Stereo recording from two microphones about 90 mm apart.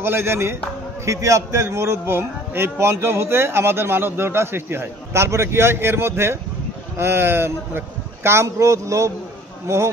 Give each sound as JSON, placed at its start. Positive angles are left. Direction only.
{"t": 0.0, "sound": "a man's voice", "side_deg": -30}